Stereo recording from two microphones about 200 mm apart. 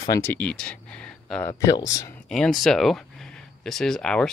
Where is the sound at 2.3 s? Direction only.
Centre (ahead or behind).